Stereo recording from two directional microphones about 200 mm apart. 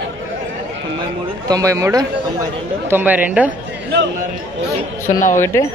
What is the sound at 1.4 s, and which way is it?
Speech, 15° right (ahead or behind).